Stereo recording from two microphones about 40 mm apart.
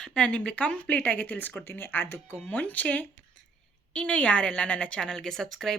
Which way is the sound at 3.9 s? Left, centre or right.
Left.